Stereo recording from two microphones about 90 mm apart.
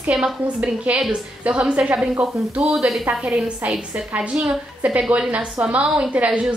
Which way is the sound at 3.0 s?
15° right (ahead or behind).